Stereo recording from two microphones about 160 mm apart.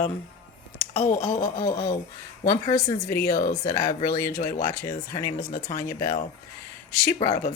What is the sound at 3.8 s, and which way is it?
Speech, 20° left (ahead or behind).